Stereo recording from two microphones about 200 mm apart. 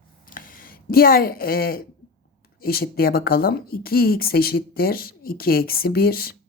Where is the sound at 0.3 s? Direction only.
45° left (ahead or behind).